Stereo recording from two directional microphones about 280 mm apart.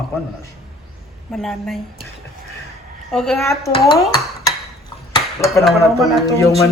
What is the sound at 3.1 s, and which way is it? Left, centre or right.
Speech, centre.